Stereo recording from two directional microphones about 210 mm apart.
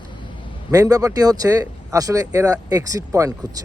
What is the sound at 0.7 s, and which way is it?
Speech, 15° right (ahead or behind).